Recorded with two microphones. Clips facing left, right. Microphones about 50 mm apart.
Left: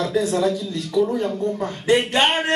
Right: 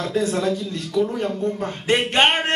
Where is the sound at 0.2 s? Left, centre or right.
Right.